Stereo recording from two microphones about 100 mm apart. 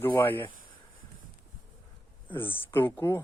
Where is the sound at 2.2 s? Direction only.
20° left (ahead or behind).